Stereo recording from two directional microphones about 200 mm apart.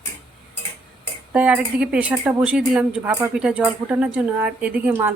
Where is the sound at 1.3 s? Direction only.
5° right (ahead or behind).